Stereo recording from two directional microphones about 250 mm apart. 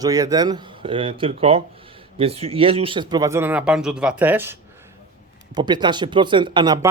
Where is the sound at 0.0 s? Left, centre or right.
Centre.